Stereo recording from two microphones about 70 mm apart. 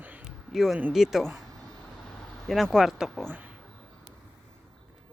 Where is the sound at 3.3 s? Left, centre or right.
Right.